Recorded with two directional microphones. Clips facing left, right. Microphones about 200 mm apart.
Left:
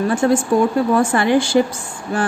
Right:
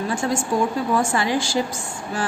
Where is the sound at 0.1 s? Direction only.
60° left (ahead or behind).